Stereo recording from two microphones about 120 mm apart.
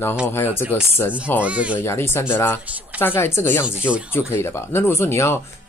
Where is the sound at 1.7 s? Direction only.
20° left (ahead or behind).